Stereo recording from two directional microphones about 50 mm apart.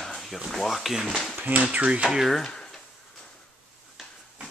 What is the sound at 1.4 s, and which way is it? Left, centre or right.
Speech, right.